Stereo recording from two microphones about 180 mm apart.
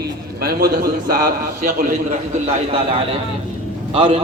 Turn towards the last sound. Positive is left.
turn(degrees=-35)  # may be behind; listen again after turning